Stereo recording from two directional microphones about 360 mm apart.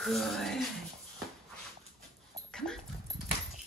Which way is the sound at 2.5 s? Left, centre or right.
Centre.